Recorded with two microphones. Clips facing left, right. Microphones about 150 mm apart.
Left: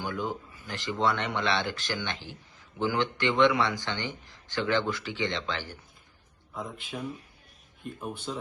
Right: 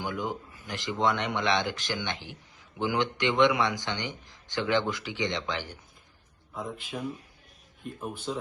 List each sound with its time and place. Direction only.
0.0 s speech: 20° right (ahead or behind)
6.5 s a man's voice: centre (ahead or behind)
8.0 s a man's voice: centre (ahead or behind)